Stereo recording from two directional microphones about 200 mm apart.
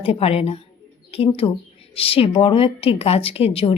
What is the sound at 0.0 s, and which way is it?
A woman's voice, 30° left (ahead or behind).